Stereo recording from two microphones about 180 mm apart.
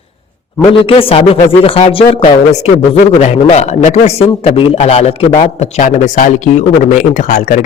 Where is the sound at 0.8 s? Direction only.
30° left (ahead or behind).